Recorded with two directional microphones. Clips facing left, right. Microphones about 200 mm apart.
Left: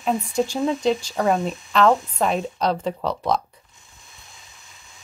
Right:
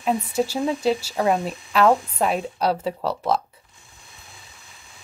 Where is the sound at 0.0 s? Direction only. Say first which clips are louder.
Even; 5° right (ahead or behind).